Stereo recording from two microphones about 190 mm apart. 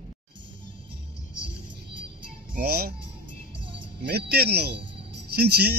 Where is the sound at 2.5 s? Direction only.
55° right (ahead or behind).